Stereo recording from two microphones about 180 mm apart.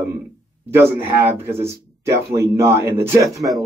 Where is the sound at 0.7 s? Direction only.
10° right (ahead or behind).